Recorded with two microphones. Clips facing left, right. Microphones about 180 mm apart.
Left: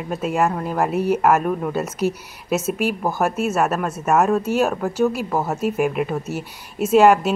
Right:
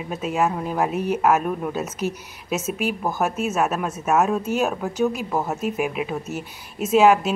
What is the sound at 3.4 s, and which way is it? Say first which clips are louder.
Speech: left 2 dB; 5° right (ahead or behind).